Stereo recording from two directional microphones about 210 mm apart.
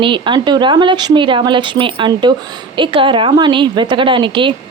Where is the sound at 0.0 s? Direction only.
25° right (ahead or behind).